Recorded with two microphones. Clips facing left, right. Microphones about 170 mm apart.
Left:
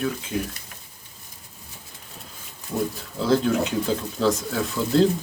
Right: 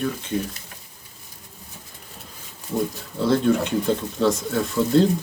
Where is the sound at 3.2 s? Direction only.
Centre (ahead or behind).